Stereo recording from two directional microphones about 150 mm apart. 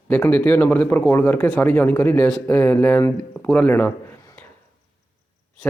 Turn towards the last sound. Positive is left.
turn(degrees=10)  # may be behind; listen again after turning